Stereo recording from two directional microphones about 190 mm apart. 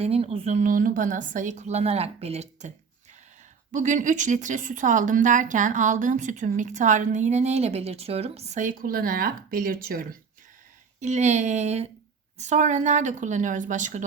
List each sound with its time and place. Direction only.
0.0 s speech: 30° right (ahead or behind); by 10.2 s 50° right (ahead or behind)
11.0 s speech: 35° right (ahead or behind)